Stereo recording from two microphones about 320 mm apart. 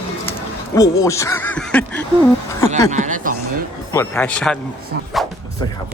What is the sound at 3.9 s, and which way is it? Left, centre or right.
Speech, centre.